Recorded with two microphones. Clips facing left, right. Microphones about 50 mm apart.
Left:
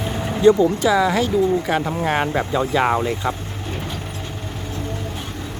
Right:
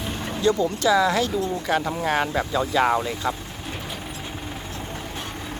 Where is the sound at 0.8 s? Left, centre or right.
Centre.